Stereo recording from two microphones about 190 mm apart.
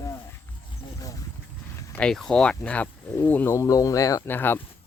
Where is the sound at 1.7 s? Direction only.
15° left (ahead or behind).